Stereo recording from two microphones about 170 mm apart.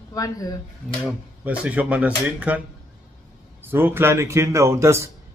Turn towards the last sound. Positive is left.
turn(degrees=-15)  # may be behind; listen again after turning